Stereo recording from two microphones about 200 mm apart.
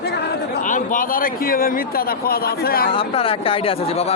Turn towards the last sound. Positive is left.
turn(degrees=30)  # may be behind; listen again after turning